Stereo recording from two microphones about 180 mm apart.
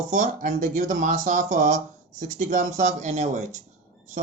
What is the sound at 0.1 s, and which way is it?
Speech, 45° right (ahead or behind).